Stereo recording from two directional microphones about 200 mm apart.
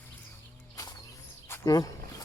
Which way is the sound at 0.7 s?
20° left (ahead or behind).